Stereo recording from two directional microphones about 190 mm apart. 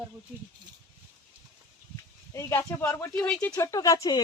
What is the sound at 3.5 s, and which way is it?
Speech, 20° left (ahead or behind).